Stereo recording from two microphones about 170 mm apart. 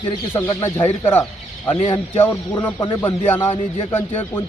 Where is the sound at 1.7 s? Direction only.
40° left (ahead or behind).